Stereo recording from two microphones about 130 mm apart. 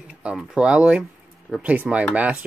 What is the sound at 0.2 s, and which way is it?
A man's voice, 10° right (ahead or behind).